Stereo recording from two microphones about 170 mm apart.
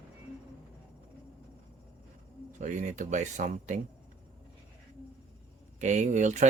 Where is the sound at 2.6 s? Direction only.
45° right (ahead or behind).